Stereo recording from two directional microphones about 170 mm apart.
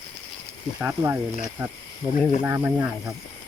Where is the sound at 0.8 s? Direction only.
10° right (ahead or behind).